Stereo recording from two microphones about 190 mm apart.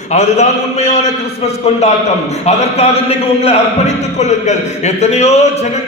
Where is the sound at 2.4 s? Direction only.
35° left (ahead or behind).